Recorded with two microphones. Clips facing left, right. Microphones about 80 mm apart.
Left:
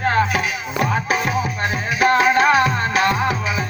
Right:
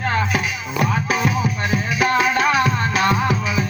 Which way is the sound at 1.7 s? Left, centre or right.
Left.